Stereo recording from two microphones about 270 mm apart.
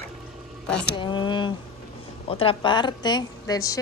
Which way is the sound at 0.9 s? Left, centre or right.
Centre.